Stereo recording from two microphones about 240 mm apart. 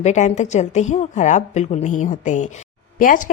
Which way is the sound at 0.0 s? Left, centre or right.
Left.